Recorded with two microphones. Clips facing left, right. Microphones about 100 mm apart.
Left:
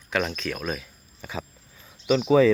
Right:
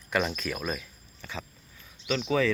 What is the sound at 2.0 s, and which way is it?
Speech, 20° left (ahead or behind).